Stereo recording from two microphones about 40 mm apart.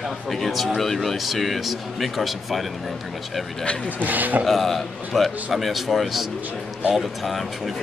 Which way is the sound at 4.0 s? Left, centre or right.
Right.